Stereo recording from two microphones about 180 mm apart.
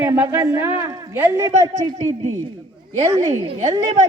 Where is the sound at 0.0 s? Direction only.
15° right (ahead or behind).